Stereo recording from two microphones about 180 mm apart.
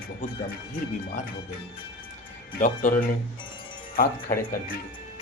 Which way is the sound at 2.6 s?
45° left (ahead or behind).